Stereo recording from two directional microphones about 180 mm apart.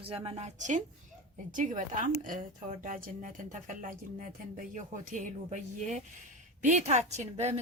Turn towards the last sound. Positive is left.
turn(degrees=-40)  # may be behind; listen again after turning